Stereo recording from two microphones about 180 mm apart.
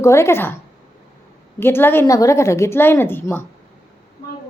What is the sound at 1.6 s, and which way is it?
A woman's voice, 10° left (ahead or behind).